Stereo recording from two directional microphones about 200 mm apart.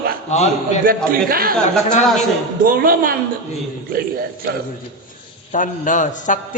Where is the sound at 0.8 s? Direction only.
45° right (ahead or behind).